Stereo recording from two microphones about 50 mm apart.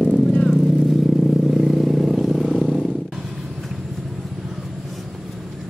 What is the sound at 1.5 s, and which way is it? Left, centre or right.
Vehicle, centre.